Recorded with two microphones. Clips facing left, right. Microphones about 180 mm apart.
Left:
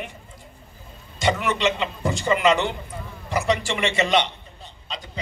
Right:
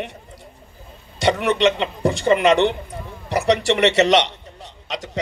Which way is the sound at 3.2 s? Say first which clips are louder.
Right 5 dB; 70° right (ahead or behind).